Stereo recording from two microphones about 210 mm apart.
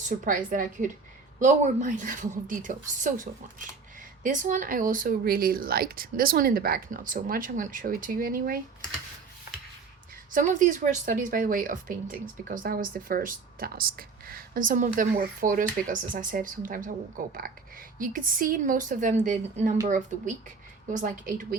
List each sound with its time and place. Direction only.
0.3 s speech: 40° right (ahead or behind)
10.3 s speech: 35° right (ahead or behind)
20.9 s speech: 40° right (ahead or behind)